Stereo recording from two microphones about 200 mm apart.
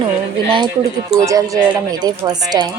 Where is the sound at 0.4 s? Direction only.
25° right (ahead or behind).